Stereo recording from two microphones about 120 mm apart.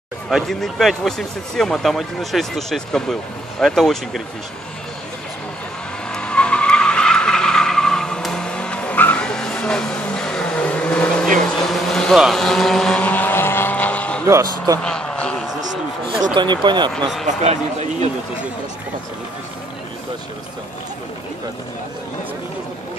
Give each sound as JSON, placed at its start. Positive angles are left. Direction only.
{"t": 0.3, "sound": "speech", "side_deg": 0}
{"t": 6.1, "sound": "vehicle", "side_deg": 10}
{"t": 14.2, "sound": "speech", "side_deg": -25}
{"t": 14.8, "sound": "a sound", "side_deg": 5}
{"t": 16.3, "sound": "speech", "side_deg": -40}
{"t": 16.9, "sound": "speech", "side_deg": 0}
{"t": 17.3, "sound": "speech", "side_deg": -65}